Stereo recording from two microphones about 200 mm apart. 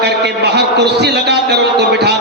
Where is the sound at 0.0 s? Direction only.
60° right (ahead or behind).